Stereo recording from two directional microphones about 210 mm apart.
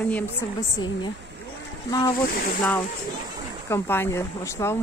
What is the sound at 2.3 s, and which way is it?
Speech, 40° left (ahead or behind).